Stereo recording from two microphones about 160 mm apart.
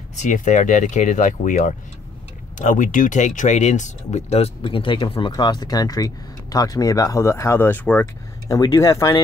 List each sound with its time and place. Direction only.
0.1 s speech: 50° left (ahead or behind); by 8.1 s 10° left (ahead or behind)
8.5 s speech: 20° left (ahead or behind)